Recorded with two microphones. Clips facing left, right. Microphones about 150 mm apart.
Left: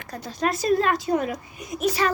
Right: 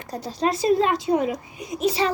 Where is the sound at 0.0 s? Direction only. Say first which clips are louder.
Right 2 dB; 35° right (ahead or behind).